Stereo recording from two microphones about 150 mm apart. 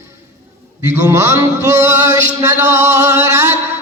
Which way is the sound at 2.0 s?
20° right (ahead or behind).